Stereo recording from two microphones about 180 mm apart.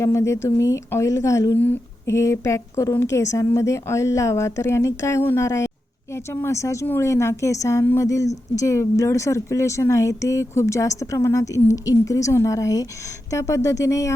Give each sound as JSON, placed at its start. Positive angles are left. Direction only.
{"t": 0.0, "sound": "a woman's voice", "side_deg": 15}